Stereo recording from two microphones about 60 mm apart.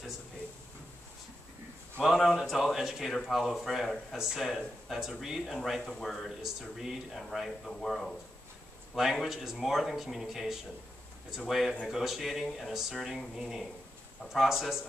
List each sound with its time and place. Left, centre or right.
2.0 s speech: centre